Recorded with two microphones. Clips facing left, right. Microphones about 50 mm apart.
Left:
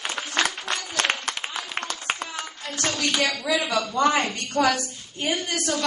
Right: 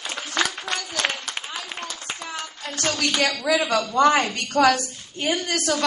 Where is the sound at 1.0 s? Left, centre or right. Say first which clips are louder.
Left 4 dB; left.